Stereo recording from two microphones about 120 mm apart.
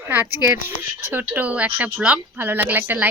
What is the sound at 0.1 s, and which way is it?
Speech, 20° right (ahead or behind).